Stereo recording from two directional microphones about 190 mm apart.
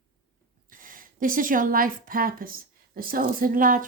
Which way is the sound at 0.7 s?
45° right (ahead or behind).